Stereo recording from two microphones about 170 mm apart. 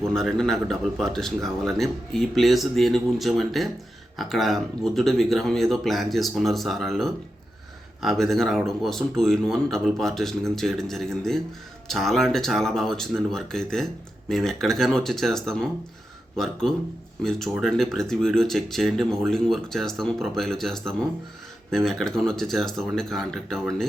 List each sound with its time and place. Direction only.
0.1 s speech: centre (ahead or behind)